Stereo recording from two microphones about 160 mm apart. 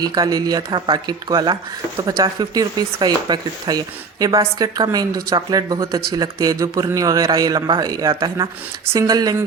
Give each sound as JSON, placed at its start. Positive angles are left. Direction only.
{"t": 0.0, "sound": "speech", "side_deg": -25}